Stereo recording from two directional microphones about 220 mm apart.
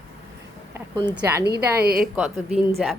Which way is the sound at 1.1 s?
10° right (ahead or behind).